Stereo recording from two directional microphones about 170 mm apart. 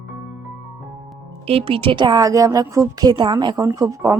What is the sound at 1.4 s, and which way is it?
A woman's voice, 35° right (ahead or behind).